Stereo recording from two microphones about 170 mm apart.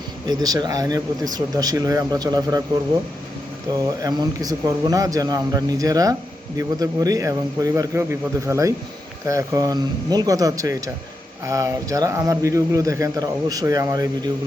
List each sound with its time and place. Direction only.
0.3 s a man's voice: 25° right (ahead or behind)
3.8 s a man's voice: 20° right (ahead or behind)